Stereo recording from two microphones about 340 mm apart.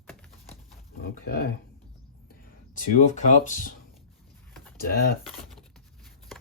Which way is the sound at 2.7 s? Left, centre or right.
Left.